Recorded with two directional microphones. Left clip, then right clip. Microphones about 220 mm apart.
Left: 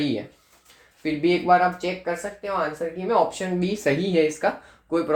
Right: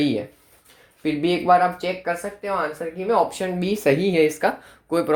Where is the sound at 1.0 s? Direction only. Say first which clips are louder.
Right 1 dB; 35° right (ahead or behind).